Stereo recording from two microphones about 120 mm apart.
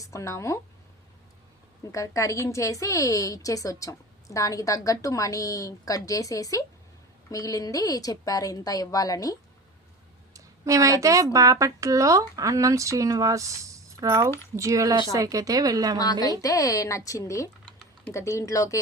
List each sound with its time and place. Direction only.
0.0 s speech: 25° left (ahead or behind)
1.9 s a woman's voice: 25° left (ahead or behind)
10.3 s a woman's voice: 25° right (ahead or behind)
16.4 s a woman's voice: 30° left (ahead or behind)